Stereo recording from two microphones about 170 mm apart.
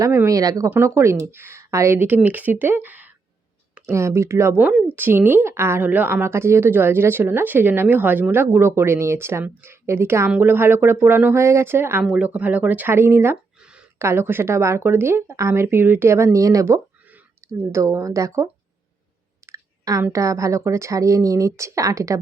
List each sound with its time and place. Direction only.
0.0 s speech: 15° right (ahead or behind)
19.5 s a woman's voice: 20° right (ahead or behind)